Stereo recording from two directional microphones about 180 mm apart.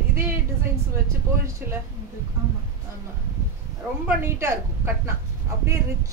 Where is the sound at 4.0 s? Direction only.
15° right (ahead or behind).